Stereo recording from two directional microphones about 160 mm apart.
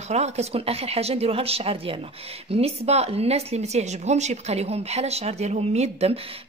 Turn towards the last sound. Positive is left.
turn(degrees=-40)  # may be behind; listen again after turning